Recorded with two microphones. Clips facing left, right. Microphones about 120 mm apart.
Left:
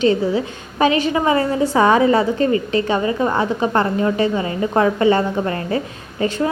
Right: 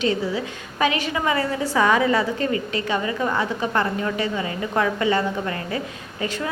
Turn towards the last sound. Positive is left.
turn(degrees=30)  # may be behind; listen again after turning